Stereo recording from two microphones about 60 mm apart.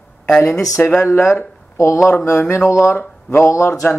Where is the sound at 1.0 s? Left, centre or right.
Left.